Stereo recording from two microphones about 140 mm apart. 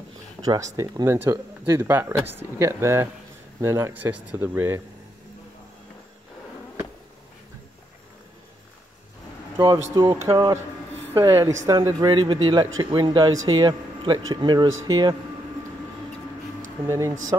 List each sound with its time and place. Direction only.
0.7 s speech: 20° right (ahead or behind)
9.6 s speech: 30° right (ahead or behind)
16.8 s speech: 20° right (ahead or behind)